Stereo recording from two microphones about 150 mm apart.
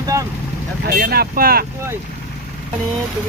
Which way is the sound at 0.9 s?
85° right.